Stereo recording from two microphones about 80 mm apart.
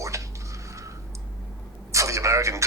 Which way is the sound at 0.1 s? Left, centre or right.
Right.